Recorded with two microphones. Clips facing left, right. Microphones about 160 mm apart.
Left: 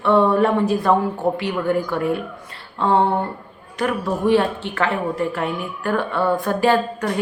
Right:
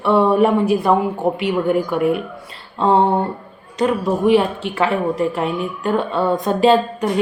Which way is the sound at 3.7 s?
20° right (ahead or behind).